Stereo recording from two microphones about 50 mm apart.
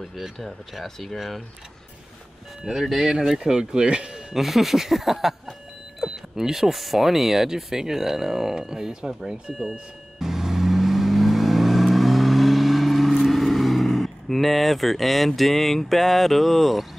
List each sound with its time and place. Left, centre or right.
0.0 s speech: centre
2.6 s speech: centre
4.3 s speech: centre
5.9 s a sound: centre